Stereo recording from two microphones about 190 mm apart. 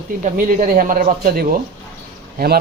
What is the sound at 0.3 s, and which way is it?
A man's voice, 45° right (ahead or behind).